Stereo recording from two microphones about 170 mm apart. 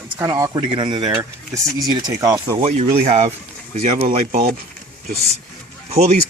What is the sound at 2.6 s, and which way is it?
Speech, 40° right (ahead or behind).